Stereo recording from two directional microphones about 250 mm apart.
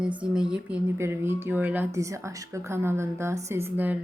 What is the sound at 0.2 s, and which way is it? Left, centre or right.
A woman's voice, centre.